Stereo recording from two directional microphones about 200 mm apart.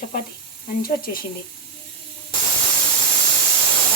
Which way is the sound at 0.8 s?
45° left (ahead or behind).